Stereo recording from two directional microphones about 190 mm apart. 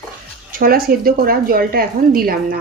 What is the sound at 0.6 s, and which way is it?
A woman's voice, 50° right (ahead or behind).